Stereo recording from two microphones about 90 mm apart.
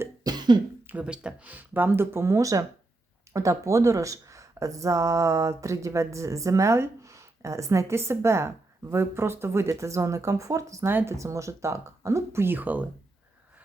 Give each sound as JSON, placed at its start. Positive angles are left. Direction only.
{"t": 0.3, "sound": "cough", "side_deg": -55}
{"t": 1.0, "sound": "speech", "side_deg": -10}